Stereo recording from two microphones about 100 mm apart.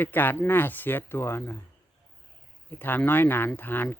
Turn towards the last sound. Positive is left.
turn(degrees=20)  # may be behind; listen again after turning